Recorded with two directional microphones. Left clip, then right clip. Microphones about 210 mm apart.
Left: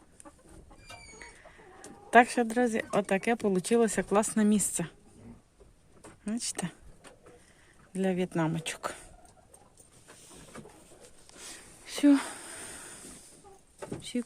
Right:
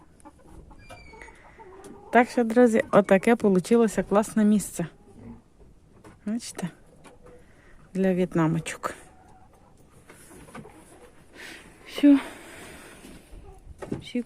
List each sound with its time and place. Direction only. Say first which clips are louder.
1.2 s chicken: right 3 dB; centre (ahead or behind)
2.5 s speech: right 9 dB; 20° right (ahead or behind)
6.2 s speech: right 2 dB; centre (ahead or behind)
7.9 s speech: right 6 dB; 5° right (ahead or behind)
11.3 s a sound: right 6 dB; 15° right (ahead or behind)
11.9 s a sound: right 5 dB; centre (ahead or behind)